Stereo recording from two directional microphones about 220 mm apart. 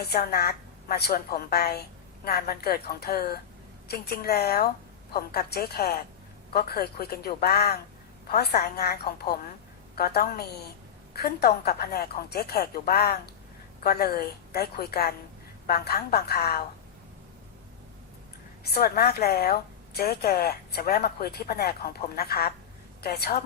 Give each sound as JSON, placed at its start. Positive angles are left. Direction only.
{"t": 0.0, "sound": "a woman's voice", "side_deg": 45}
{"t": 18.6, "sound": "a woman's voice", "side_deg": 45}